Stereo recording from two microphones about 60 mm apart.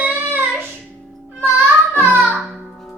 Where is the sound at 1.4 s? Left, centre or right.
Right.